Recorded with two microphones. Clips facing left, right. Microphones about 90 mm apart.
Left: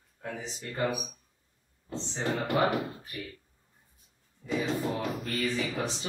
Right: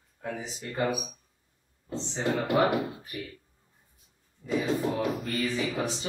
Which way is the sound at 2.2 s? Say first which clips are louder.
Right 3 dB; centre (ahead or behind).